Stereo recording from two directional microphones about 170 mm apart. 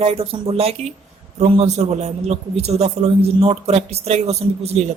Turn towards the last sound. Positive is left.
turn(degrees=-40)  # may be behind; listen again after turning